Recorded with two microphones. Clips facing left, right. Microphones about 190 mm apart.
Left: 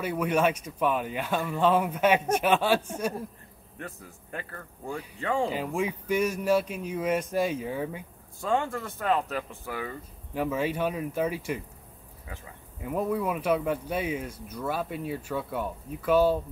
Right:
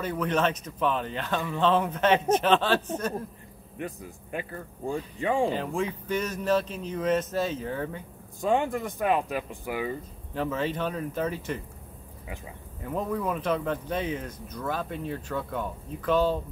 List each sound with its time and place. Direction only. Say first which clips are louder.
0.0 s speech: left 1 dB; 10° left (ahead or behind)
3.7 s speech: right 5 dB; 15° right (ahead or behind)
5.5 s speech: even; 10° left (ahead or behind)
8.4 s speech: right 3 dB; 15° right (ahead or behind)
10.3 s speech: left 1 dB; 10° left (ahead or behind)
12.8 s speech: left 1 dB; 10° left (ahead or behind)